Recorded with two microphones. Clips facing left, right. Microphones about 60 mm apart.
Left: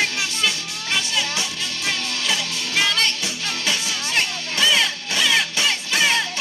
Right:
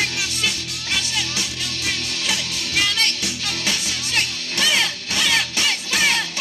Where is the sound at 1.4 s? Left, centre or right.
Left.